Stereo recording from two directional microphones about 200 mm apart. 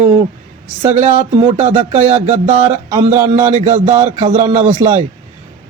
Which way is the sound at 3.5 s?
35° right (ahead or behind).